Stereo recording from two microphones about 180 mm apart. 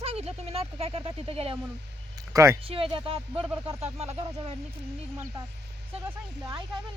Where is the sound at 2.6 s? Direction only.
30° right (ahead or behind).